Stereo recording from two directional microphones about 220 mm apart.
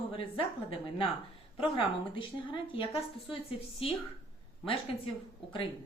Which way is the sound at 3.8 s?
25° left (ahead or behind).